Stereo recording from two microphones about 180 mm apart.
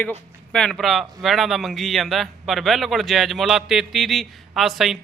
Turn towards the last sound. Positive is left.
turn(degrees=0)  # may be behind; listen again after turning